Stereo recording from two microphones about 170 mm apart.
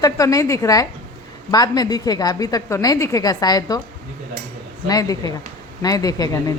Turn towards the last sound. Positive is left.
turn(degrees=20)  # may be behind; listen again after turning